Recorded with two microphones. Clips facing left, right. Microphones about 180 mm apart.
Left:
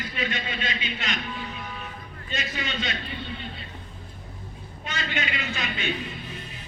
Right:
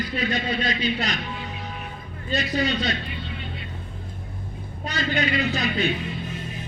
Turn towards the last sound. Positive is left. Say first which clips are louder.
# right 8 dB
turn(degrees=-35)  # may be behind; listen again after turning